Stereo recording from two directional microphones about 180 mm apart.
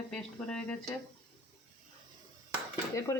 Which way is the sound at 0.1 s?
5° left (ahead or behind).